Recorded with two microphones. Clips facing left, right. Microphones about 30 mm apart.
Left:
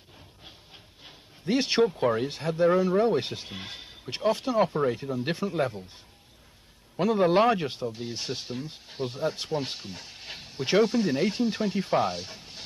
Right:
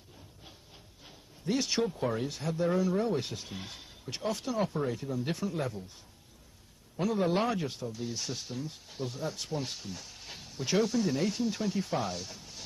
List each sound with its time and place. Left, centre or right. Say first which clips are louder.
1.0 s speech: left 3 dB; left
7.0 s speech: left 7 dB; left